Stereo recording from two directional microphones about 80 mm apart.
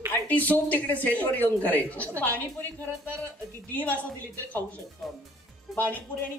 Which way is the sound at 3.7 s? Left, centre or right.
Centre.